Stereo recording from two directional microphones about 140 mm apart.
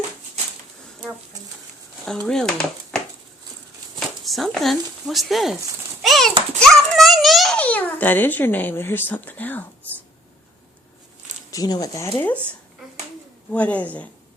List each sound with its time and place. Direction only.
2.0 s speech: 5° left (ahead or behind)
4.2 s a child's voice: centre (ahead or behind)
11.5 s speech: 30° left (ahead or behind)
13.5 s a child's voice: 10° left (ahead or behind)